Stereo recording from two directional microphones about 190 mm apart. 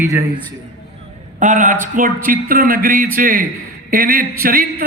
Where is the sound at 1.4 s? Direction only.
40° right (ahead or behind).